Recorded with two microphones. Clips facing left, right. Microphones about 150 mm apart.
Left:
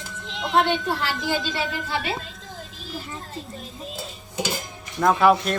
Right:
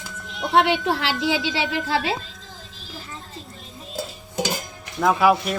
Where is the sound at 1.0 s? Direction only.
90° right.